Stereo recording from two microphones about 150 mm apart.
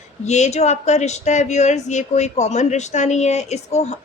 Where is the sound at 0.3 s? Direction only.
50° left (ahead or behind).